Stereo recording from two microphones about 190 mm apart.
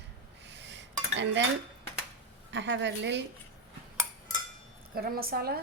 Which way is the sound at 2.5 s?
70° right (ahead or behind).